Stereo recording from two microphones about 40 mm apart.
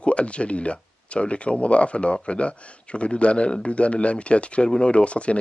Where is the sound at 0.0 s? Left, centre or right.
Left.